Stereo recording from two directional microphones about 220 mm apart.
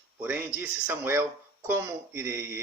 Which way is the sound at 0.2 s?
10° right (ahead or behind).